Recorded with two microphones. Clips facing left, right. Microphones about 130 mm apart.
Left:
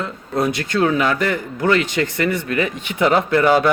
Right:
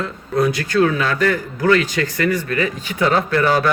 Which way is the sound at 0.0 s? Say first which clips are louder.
Right 2 dB; 25° left (ahead or behind).